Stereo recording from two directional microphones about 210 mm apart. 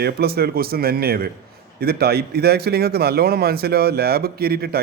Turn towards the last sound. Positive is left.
turn(degrees=-45)  # may be behind; listen again after turning